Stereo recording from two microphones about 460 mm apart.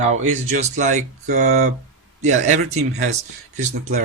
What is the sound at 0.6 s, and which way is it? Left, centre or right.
Speech, centre.